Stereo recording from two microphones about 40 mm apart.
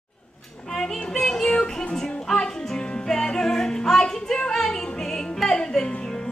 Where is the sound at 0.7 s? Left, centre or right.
Centre.